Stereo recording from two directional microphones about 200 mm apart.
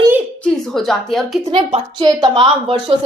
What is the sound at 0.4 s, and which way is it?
Speech, centre (ahead or behind).